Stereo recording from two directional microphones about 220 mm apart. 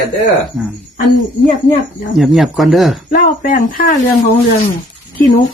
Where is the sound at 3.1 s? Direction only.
40° left (ahead or behind).